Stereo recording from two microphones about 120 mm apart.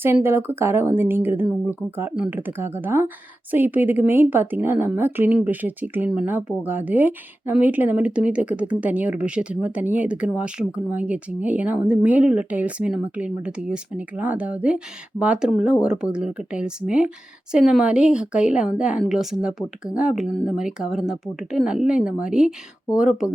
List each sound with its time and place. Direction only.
0.0 s a woman's voice: 20° right (ahead or behind)
2.1 s speech: 5° right (ahead or behind)
2.5 s a woman's voice: 20° right (ahead or behind)